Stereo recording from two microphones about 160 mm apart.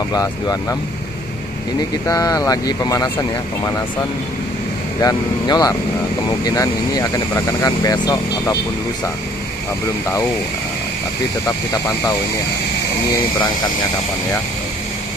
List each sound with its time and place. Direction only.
0.1 s speech: 25° left (ahead or behind)
2.0 s speech: 20° left (ahead or behind)
5.0 s speech: 25° left (ahead or behind)
11.4 s speech: 20° left (ahead or behind)